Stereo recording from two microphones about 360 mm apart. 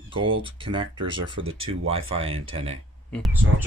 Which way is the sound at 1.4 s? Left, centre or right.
Right.